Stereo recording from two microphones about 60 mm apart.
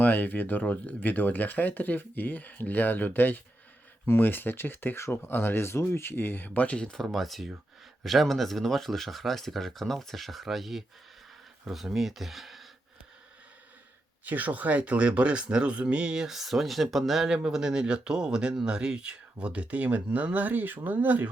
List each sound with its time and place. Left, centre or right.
0.0 s speech: left
6.9 s speech: centre
14.3 s speech: right